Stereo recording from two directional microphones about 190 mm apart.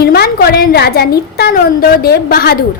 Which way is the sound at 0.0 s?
55° left (ahead or behind).